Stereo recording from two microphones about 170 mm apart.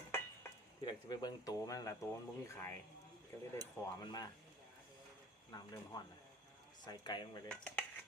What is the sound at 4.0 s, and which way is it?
Speech, 20° left (ahead or behind).